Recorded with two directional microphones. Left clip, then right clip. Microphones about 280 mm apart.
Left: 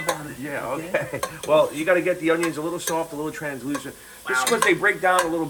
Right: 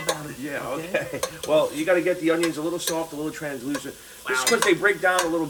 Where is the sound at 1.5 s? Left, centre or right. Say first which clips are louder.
Left 2 dB; centre.